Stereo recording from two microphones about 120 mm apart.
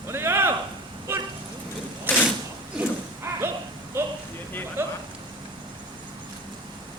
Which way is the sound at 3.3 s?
25° right (ahead or behind).